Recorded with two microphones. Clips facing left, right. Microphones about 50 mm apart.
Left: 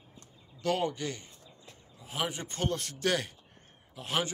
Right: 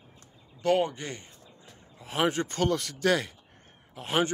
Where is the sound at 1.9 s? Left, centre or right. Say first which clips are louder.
Right 8 dB; right.